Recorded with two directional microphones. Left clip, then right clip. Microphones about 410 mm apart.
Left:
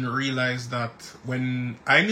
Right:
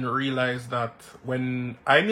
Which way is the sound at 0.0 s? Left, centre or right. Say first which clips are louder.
Even; centre.